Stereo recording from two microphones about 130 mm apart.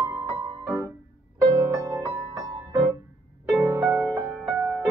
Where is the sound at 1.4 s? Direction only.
25° right (ahead or behind).